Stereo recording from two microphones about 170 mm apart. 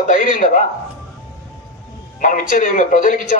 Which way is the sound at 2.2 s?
50° left (ahead or behind).